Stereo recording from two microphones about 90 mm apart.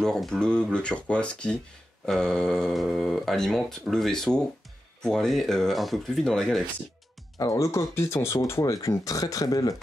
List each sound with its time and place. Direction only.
0.0 s speech: 5° left (ahead or behind)
7.3 s speech: 40° left (ahead or behind)